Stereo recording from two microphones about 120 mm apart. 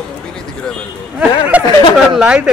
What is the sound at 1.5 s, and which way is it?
Speech, 15° right (ahead or behind).